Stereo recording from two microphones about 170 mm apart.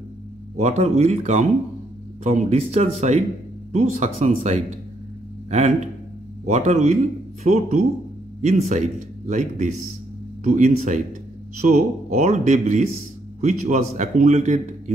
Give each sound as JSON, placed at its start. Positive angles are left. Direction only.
{"t": 0.6, "sound": "speech", "side_deg": -40}